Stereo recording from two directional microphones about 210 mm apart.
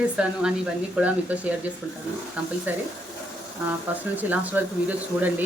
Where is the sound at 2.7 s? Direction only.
10° right (ahead or behind).